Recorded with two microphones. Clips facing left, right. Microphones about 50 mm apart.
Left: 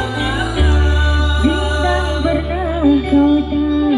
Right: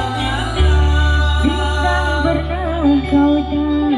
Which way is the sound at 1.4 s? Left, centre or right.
Centre.